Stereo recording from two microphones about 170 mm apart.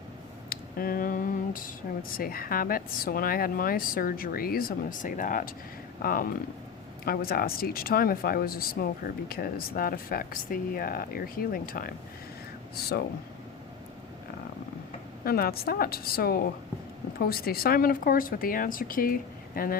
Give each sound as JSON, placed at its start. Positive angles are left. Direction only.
{"t": 0.5, "sound": "speech", "side_deg": 60}
{"t": 15.2, "sound": "speech", "side_deg": 65}